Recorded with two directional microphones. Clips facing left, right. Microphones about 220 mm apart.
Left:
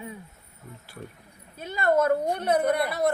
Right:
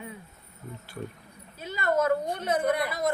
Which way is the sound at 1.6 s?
55° left (ahead or behind).